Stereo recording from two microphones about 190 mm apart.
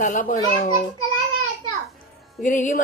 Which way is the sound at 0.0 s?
45° left (ahead or behind).